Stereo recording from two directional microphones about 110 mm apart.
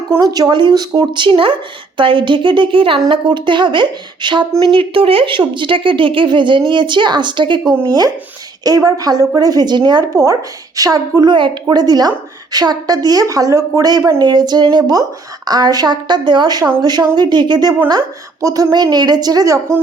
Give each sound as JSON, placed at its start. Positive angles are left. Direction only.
{"t": 0.2, "sound": "a woman's voice", "side_deg": -35}